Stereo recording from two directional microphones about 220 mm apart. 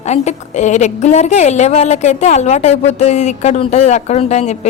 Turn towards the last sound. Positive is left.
turn(degrees=30)  # may be behind; listen again after turning